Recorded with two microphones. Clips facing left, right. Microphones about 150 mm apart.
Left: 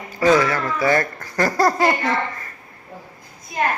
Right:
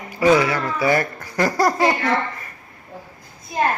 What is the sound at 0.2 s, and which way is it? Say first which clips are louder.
Speech: even; 15° right (ahead or behind).